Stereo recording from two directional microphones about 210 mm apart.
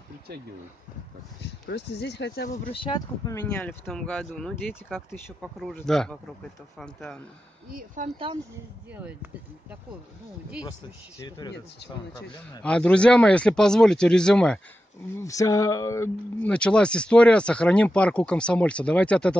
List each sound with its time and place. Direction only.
0.3 s speech: 50° right (ahead or behind)
1.4 s speech: 55° left (ahead or behind)
2.5 s speech: 30° left (ahead or behind); by 7.2 s 5° left (ahead or behind)
7.7 s speech: 40° right (ahead or behind)
8.9 s speech: 10° right (ahead or behind)
11.1 s speech: 20° left (ahead or behind)
11.8 s speech: 50° left (ahead or behind)
12.6 s speech: 5° left (ahead or behind)
15.1 s speech: 15° left (ahead or behind)